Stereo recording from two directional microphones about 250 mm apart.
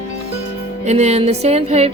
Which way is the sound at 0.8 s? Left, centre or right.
Right.